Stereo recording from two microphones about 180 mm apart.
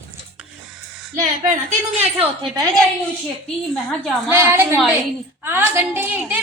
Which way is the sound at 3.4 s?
5° left (ahead or behind).